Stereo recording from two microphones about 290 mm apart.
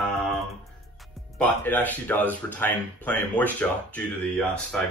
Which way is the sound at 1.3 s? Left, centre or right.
Centre.